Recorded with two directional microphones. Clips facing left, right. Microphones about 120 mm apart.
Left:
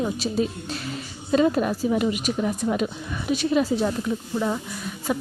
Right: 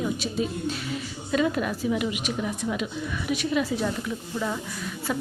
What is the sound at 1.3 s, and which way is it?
Speech, 30° left (ahead or behind).